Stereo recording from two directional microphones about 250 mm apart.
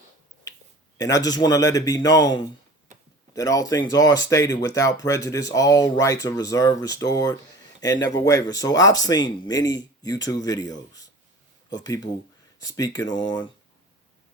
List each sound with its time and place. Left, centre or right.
0.9 s speech: centre